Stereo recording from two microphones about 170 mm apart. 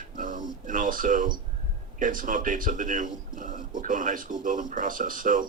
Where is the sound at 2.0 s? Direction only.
50° right (ahead or behind).